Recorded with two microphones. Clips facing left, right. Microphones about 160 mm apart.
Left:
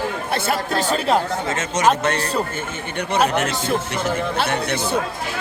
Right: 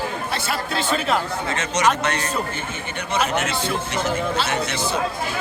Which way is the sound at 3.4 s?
45° left (ahead or behind).